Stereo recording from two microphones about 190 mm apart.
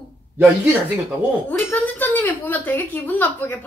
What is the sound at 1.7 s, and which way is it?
A woman's voice, 10° left (ahead or behind).